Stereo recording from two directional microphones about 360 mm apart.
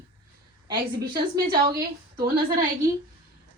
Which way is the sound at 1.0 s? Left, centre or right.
Right.